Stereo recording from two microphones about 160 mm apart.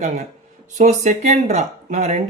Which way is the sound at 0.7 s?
50° right (ahead or behind).